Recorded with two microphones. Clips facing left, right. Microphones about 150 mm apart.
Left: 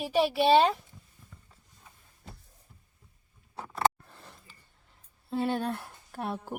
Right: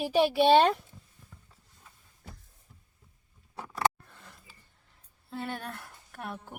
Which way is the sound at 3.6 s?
25° left (ahead or behind).